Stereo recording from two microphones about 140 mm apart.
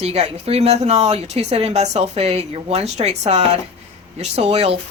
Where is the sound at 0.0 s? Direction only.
50° right (ahead or behind).